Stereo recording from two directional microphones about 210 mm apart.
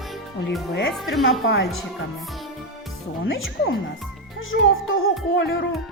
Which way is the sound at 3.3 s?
70° left (ahead or behind).